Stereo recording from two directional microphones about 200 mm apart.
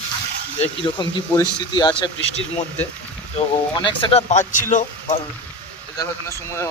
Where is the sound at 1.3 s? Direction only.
20° left (ahead or behind); by 5.2 s 40° left (ahead or behind).